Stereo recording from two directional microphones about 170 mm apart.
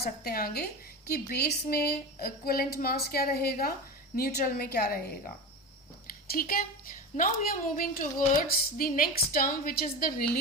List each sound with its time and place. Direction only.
0.0 s a woman's voice: 60° left (ahead or behind)
6.1 s a woman's voice: 60° left (ahead or behind)